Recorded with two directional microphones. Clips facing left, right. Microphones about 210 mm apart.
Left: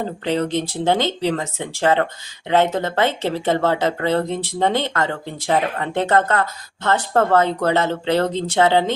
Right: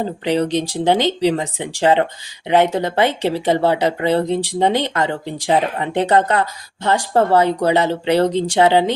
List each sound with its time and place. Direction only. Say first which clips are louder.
0.3 s speech: right 3 dB; 15° right (ahead or behind)